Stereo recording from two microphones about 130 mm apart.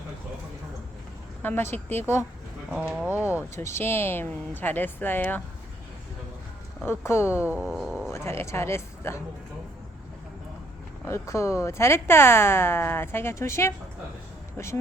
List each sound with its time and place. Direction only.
1.4 s speech: 15° left (ahead or behind)
2.7 s speech: 5° right (ahead or behind)
3.5 s speech: 20° left (ahead or behind)
6.8 s speech: 20° left (ahead or behind)
7.3 s speech: 10° right (ahead or behind)
8.1 s speech: 20° left (ahead or behind)
11.0 s speech: 20° left (ahead or behind)